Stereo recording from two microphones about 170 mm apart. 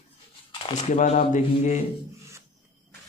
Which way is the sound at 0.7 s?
45° left (ahead or behind).